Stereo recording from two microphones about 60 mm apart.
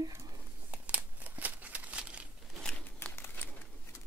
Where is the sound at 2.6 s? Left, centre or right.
Centre.